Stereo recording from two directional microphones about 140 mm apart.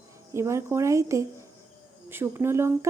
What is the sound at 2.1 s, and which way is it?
Speech, 15° right (ahead or behind).